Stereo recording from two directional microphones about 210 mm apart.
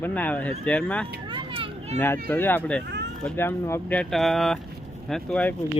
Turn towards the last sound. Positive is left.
turn(degrees=5)  # may be behind; listen again after turning